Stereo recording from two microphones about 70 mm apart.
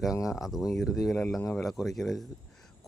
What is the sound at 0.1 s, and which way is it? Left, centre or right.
Speech, left.